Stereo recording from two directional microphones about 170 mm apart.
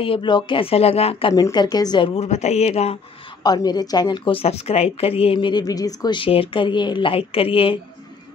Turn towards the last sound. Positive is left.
turn(degrees=30)  # may be behind; listen again after turning